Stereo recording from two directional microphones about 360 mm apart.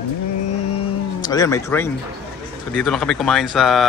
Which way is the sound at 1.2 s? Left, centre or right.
Centre.